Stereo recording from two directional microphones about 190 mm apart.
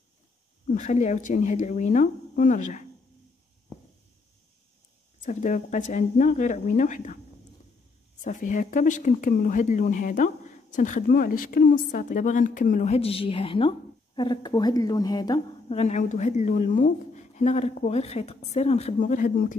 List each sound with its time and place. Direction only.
0.7 s speech: 40° left (ahead or behind)
5.2 s speech: 40° left (ahead or behind)
8.2 s speech: 40° left (ahead or behind); by 15.4 s 20° left (ahead or behind)
15.7 s speech: 35° left (ahead or behind)